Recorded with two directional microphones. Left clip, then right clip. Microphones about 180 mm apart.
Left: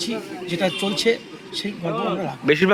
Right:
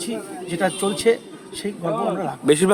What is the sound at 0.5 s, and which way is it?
Speech, 15° right (ahead or behind).